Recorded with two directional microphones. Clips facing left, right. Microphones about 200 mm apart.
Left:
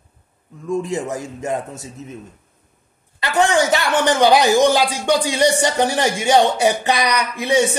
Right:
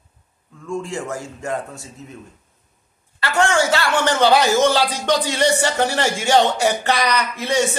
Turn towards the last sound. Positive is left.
turn(degrees=15)  # may be behind; listen again after turning